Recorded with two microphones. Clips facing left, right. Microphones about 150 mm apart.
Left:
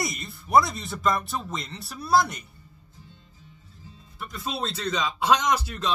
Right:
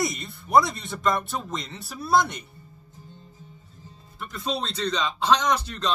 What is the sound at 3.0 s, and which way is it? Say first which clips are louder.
Music: right 9 dB; 40° right (ahead or behind).